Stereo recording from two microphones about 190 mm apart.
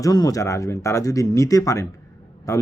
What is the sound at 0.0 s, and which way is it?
Speech, 20° left (ahead or behind).